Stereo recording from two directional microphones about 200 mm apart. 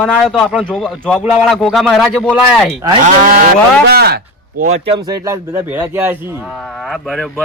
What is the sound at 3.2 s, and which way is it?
Speech, 45° right (ahead or behind).